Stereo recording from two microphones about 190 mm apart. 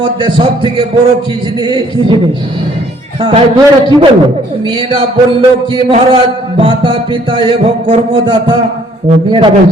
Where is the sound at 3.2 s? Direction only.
30° right (ahead or behind).